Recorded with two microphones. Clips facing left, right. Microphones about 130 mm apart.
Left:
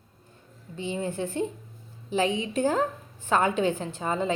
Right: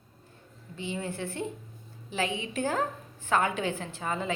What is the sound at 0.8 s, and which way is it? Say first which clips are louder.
A woman's voice: left 4 dB; 20° left (ahead or behind).